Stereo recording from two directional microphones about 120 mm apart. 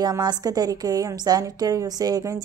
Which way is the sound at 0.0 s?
35° right (ahead or behind).